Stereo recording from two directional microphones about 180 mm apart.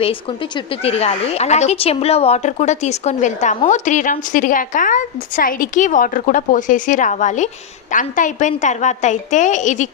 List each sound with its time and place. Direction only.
0.9 s a woman's voice: 35° left (ahead or behind)